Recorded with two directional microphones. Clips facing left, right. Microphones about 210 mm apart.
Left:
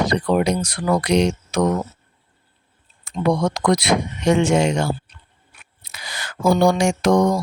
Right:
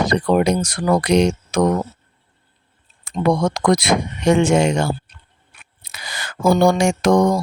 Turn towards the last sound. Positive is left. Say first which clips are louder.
# right 1 dB
turn(degrees=-50)  # may be behind; listen again after turning